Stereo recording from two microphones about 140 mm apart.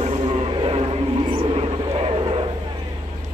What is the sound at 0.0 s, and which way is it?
Vehicle, 45° right (ahead or behind).